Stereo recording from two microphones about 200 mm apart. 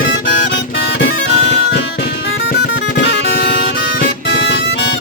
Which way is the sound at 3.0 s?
60° left (ahead or behind).